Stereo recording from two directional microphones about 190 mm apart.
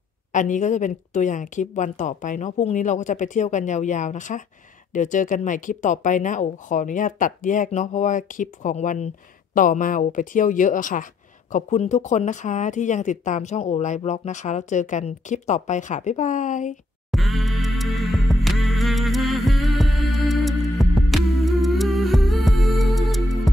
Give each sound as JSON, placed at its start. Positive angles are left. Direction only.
{"t": 0.3, "sound": "speech", "side_deg": 40}
{"t": 17.1, "sound": "music", "side_deg": 0}